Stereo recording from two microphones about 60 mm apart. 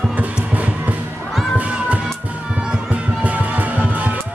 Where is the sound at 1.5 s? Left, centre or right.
Right.